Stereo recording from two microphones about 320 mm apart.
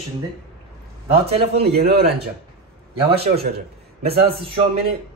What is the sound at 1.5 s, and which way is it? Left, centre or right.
Speech, right.